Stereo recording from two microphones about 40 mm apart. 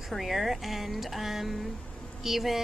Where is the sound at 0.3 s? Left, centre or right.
Centre.